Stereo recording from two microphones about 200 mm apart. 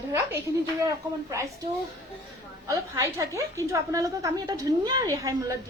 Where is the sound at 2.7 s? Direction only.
15° right (ahead or behind).